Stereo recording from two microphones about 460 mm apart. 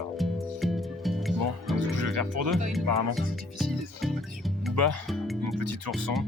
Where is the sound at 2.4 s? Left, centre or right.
Right.